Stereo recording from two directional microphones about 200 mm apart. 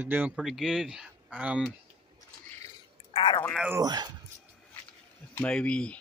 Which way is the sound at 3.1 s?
25° left (ahead or behind).